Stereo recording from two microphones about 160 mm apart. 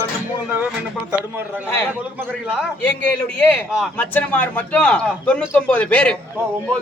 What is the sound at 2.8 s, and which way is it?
Speech, 10° left (ahead or behind).